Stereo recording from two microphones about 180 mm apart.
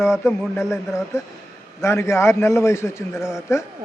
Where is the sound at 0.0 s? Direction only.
5° right (ahead or behind).